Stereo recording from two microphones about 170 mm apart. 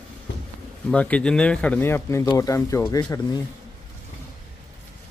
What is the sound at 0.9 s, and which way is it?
Speech, 5° left (ahead or behind).